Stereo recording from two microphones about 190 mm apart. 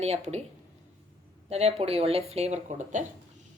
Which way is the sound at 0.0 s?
35° right (ahead or behind).